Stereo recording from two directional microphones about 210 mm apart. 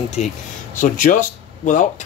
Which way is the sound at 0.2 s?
30° left (ahead or behind).